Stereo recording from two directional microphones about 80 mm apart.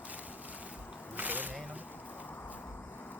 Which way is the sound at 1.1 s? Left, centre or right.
Right.